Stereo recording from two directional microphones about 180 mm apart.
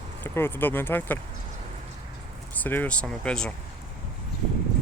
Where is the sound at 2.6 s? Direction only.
10° left (ahead or behind).